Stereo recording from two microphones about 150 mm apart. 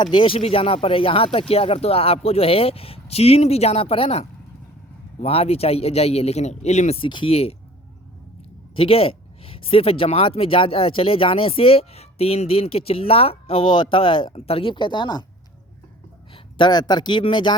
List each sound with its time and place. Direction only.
0.0 s speech: 35° left (ahead or behind)
8.7 s speech: 40° left (ahead or behind)
16.3 s speech: 30° left (ahead or behind)